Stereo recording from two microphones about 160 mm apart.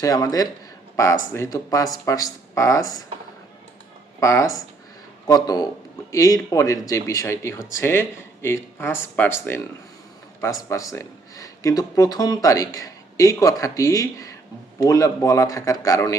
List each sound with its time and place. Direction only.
0.0 s speech: 20° left (ahead or behind)
4.2 s speech: 20° left (ahead or behind)